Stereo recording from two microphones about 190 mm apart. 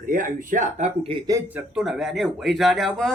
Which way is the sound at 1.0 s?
20° right (ahead or behind).